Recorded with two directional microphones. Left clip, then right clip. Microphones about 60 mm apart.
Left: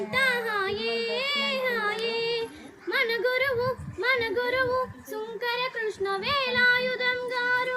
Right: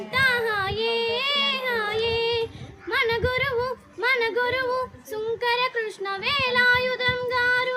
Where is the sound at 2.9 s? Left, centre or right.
Right.